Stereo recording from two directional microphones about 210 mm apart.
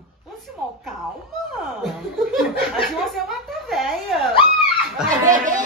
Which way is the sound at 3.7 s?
Centre (ahead or behind).